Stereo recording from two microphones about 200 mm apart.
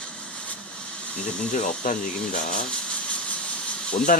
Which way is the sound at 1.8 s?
40° left (ahead or behind).